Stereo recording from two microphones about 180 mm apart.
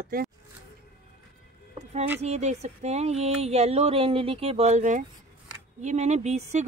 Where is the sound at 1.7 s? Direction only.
35° right (ahead or behind).